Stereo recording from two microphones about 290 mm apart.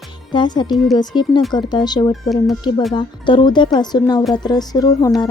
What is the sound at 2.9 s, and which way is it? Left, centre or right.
Speech, centre.